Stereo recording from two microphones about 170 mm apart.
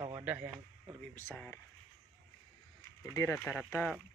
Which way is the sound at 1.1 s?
10° left (ahead or behind).